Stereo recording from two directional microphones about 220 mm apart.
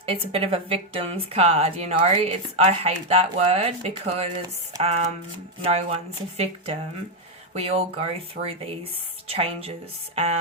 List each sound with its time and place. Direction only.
0.0 s a woman's voice: 25° right (ahead or behind)
6.3 s a woman's voice: 30° right (ahead or behind)